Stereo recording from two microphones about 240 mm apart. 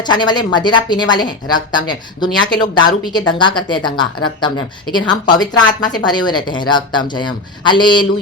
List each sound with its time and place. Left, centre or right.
0.0 s a woman's voice: centre